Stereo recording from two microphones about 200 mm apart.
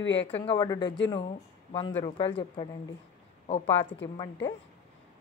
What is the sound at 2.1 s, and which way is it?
Speech, 25° left (ahead or behind).